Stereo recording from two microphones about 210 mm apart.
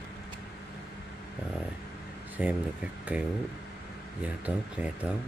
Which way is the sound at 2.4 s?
5° right (ahead or behind).